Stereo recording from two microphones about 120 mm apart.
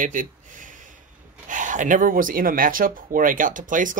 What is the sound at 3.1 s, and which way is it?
Speech, 90° right.